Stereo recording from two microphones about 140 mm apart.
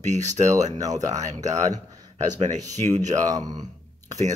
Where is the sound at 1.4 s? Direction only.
60° right (ahead or behind).